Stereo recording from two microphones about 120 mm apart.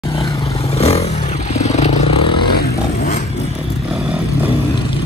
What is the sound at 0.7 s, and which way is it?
Vehicle, 60° left (ahead or behind).